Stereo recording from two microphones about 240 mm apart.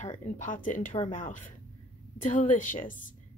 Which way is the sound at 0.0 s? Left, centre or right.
Left.